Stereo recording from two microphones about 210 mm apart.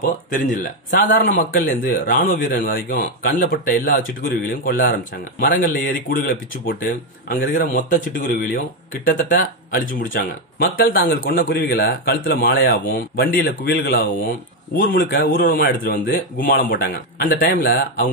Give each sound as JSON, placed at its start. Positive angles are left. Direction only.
{"t": 0.3, "sound": "speech", "side_deg": 40}